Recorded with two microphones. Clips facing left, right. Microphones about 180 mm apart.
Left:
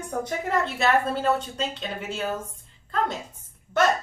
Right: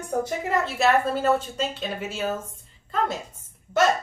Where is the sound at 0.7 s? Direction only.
5° right (ahead or behind).